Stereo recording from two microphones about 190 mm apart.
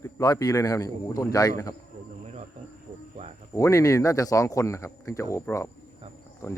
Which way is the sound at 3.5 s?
15° left (ahead or behind).